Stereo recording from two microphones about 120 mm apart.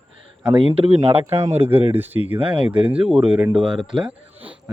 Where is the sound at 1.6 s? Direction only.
15° right (ahead or behind).